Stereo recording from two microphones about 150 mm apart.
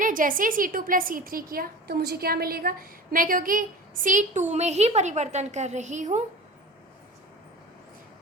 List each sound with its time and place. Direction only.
0.0 s a woman's voice: 65° right (ahead or behind)